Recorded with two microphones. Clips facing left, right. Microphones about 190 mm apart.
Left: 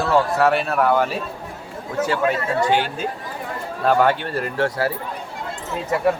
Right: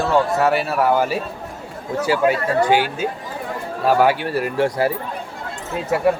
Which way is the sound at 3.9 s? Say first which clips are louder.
Right 1 dB; 10° right (ahead or behind).